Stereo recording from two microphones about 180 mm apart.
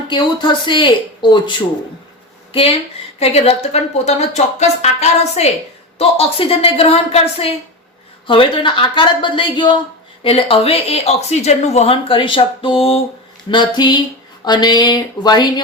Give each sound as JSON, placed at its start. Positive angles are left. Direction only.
{"t": 0.1, "sound": "speech", "side_deg": 25}